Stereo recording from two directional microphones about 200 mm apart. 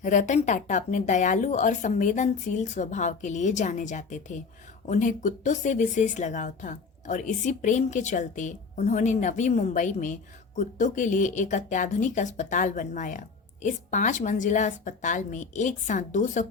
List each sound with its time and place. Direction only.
0.0 s speech: 40° left (ahead or behind)